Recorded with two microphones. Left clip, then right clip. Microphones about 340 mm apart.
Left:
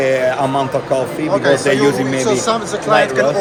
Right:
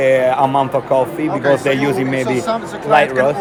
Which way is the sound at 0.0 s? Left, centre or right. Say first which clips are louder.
Right 2 dB; centre.